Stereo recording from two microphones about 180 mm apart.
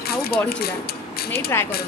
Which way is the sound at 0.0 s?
60° left (ahead or behind).